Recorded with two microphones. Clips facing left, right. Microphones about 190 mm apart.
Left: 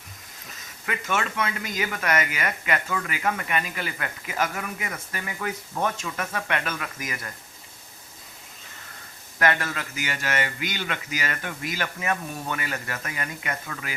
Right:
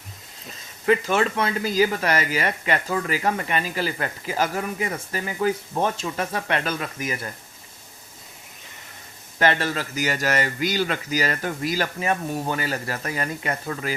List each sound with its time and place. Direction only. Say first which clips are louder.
0.9 s speech: right 8 dB; 30° right (ahead or behind)
9.4 s speech: right 3 dB; 30° right (ahead or behind)